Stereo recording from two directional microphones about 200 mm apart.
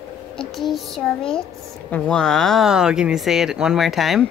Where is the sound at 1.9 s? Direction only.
5° left (ahead or behind).